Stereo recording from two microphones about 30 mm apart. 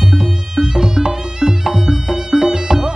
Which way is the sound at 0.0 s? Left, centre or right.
Centre.